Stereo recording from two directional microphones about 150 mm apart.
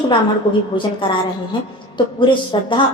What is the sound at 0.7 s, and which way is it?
A woman's voice, 30° left (ahead or behind).